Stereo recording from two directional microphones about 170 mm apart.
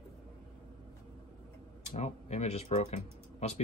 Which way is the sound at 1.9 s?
40° left (ahead or behind).